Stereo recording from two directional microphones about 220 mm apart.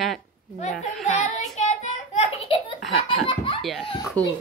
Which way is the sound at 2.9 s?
25° left (ahead or behind).